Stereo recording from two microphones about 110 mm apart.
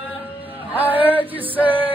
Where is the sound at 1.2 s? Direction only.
15° right (ahead or behind).